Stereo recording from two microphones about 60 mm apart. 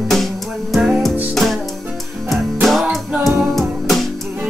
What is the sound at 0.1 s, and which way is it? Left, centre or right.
Music, centre.